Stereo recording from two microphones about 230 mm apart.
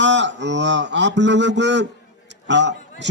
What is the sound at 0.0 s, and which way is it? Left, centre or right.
A man's voice, right.